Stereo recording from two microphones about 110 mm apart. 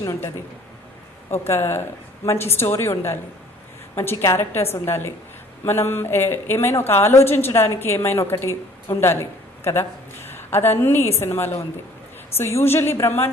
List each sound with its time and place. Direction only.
0.0 s a woman's voice: 25° left (ahead or behind)
1.3 s a woman's voice: 25° left (ahead or behind)